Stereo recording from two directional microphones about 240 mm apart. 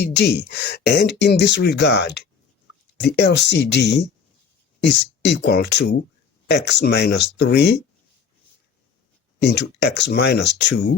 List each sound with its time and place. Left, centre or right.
0.0 s speech: left
9.4 s speech: left